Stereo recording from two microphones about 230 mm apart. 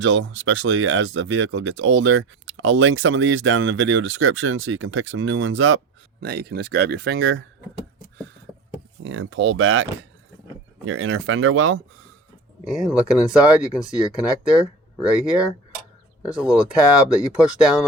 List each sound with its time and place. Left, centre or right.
0.0 s speech: right
6.1 s speech: right
9.0 s speech: right
10.8 s speech: right
12.6 s speech: centre
15.0 s speech: centre